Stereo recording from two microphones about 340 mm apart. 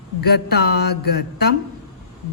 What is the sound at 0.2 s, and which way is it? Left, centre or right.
A woman's voice, left.